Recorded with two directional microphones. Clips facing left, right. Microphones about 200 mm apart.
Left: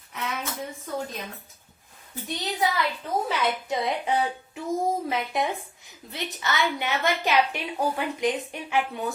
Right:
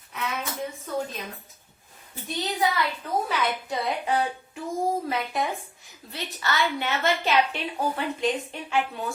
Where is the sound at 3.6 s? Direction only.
20° left (ahead or behind).